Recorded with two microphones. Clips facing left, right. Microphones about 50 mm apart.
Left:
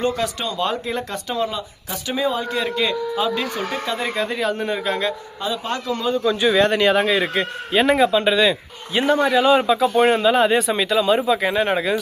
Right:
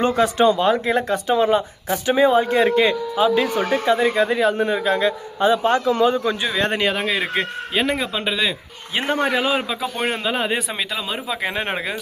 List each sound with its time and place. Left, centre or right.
0.0 s a man's voice: right
1.5 s a man's voice: right
3.9 s speech: centre
5.4 s a man's voice: right
6.8 s speech: centre
8.9 s a man's voice: right
9.4 s speech: centre
11.5 s a man's voice: right